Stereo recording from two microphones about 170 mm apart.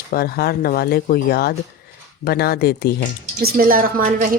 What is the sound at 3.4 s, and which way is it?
Speech, 55° right (ahead or behind).